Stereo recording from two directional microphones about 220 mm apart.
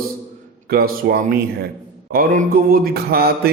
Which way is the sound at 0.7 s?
45° right (ahead or behind).